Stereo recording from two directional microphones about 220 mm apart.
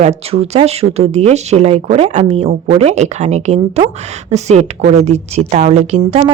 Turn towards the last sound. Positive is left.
turn(degrees=-30)  # may be behind; listen again after turning